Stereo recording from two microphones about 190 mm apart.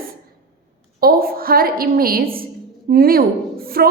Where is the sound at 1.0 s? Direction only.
50° right (ahead or behind).